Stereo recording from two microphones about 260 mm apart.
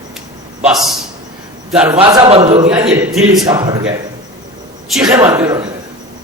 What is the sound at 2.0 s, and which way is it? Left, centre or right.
Speech, centre.